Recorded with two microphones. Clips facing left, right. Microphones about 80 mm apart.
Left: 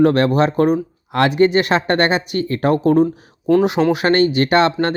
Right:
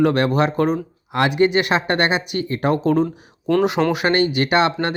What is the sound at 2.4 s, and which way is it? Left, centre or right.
Speech, left.